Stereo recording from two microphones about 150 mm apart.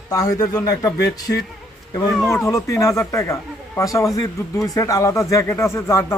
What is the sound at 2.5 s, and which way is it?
Speech, 20° left (ahead or behind).